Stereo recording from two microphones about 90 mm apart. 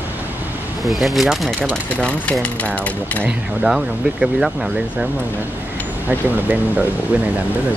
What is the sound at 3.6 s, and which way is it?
Speech, 5° right (ahead or behind).